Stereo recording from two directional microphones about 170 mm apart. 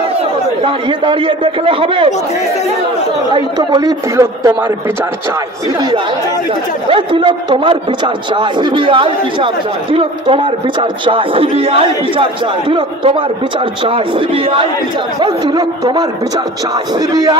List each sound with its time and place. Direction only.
0.6 s a man's voice: 30° right (ahead or behind)
3.3 s speech: 25° right (ahead or behind)
6.9 s a man's voice: 30° right (ahead or behind)
17.1 s speech: 25° right (ahead or behind)